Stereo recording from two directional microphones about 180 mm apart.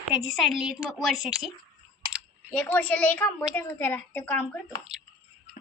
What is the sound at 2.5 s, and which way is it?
A woman's voice, 10° left (ahead or behind).